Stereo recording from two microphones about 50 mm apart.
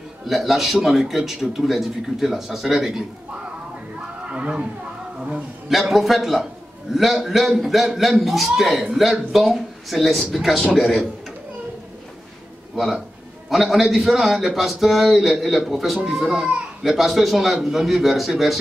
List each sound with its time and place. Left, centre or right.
0.3 s a man's voice: centre
4.3 s speech: right
5.7 s a man's voice: centre
12.7 s a man's voice: centre